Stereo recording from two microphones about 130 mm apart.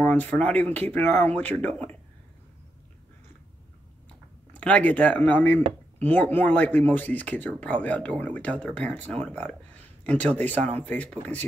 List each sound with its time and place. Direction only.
0.0 s speech: 15° left (ahead or behind)
4.6 s speech: 10° left (ahead or behind)
10.5 s speech: 60° right (ahead or behind)
10.8 s speech: 10° left (ahead or behind)